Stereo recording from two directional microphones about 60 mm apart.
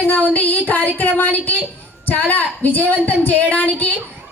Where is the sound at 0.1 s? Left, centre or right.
Left.